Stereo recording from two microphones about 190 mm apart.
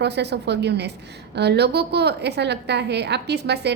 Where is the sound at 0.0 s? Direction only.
60° right (ahead or behind).